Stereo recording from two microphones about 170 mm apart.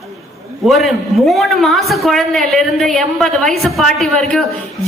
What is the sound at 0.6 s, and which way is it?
A woman's voice, centre (ahead or behind).